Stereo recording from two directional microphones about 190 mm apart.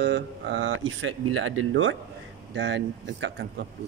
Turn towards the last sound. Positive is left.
turn(degrees=-70)  # may be behind; listen again after turning